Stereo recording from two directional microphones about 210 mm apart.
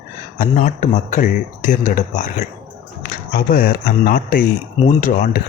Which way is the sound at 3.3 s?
45° left (ahead or behind).